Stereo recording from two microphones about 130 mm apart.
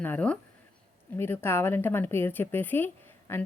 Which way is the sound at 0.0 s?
10° left (ahead or behind).